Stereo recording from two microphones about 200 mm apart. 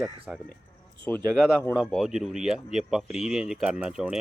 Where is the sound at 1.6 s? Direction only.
5° left (ahead or behind).